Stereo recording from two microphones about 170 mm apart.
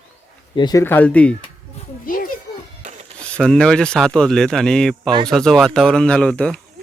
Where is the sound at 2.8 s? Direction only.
40° right (ahead or behind).